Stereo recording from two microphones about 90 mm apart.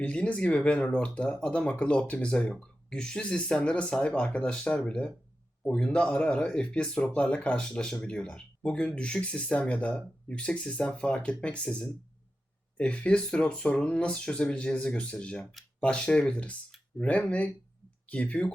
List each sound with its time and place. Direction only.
0.0 s speech: 15° left (ahead or behind)